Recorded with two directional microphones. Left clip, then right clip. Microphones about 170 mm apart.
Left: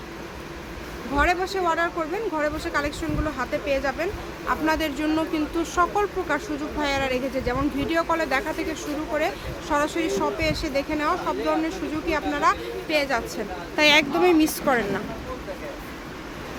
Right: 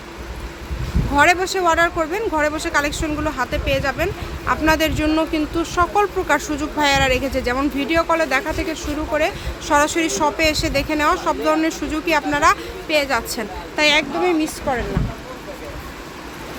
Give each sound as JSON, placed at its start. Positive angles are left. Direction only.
{"t": 1.1, "sound": "speech", "side_deg": -40}
{"t": 12.9, "sound": "a woman's voice", "side_deg": -20}
{"t": 13.7, "sound": "speech", "side_deg": 0}
{"t": 14.2, "sound": "speech", "side_deg": 10}